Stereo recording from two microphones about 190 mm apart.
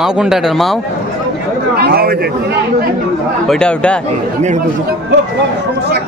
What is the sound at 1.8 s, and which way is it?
Speech, 55° right (ahead or behind).